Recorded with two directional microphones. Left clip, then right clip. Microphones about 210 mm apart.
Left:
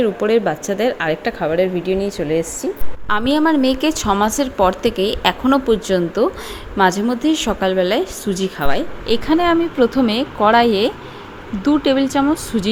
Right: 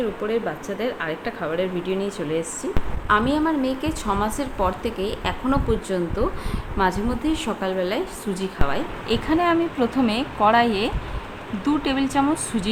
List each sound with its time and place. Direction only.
0.0 s a woman's voice: 40° left (ahead or behind)
3.1 s a woman's voice: 40° left (ahead or behind); by 12.6 s 20° left (ahead or behind)